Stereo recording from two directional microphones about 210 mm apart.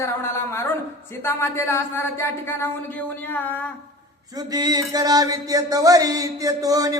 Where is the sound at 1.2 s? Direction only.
10° left (ahead or behind).